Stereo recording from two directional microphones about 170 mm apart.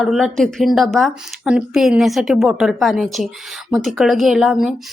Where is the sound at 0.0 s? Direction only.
Centre (ahead or behind).